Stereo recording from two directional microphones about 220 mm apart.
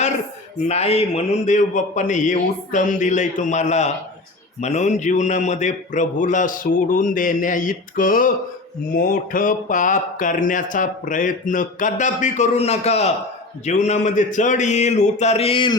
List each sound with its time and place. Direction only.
0.7 s speech: 30° left (ahead or behind)